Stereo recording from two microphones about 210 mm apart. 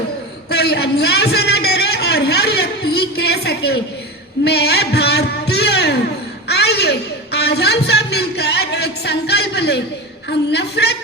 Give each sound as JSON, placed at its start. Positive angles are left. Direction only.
{"t": 0.5, "sound": "a man's voice", "side_deg": 50}
{"t": 6.5, "sound": "a sound", "side_deg": 50}
{"t": 7.3, "sound": "music", "side_deg": 50}
{"t": 10.2, "sound": "a woman's voice", "side_deg": 50}